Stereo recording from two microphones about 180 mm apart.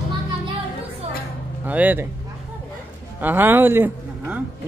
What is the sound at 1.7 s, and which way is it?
Speech, 10° right (ahead or behind).